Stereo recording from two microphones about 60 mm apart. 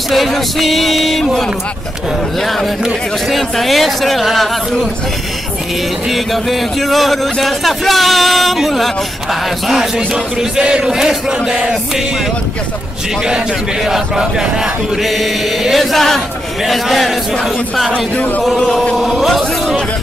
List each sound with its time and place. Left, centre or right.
0.1 s a sound: centre
2.4 s speech: centre
6.0 s speech: centre
13.8 s speech: centre
18.1 s a sound: left
18.9 s speech: centre